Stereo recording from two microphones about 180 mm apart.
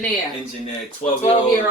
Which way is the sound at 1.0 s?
35° left (ahead or behind).